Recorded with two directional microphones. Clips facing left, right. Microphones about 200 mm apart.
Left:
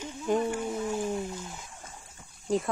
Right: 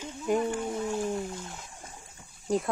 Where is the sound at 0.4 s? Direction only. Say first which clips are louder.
Even; 5° left (ahead or behind).